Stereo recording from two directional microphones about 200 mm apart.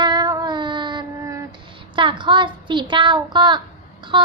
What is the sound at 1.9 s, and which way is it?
A woman's voice, 25° right (ahead or behind).